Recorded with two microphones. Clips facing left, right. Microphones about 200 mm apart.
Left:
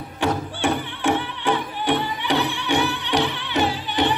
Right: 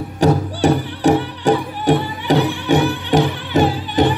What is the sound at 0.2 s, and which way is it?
Music, 40° right (ahead or behind).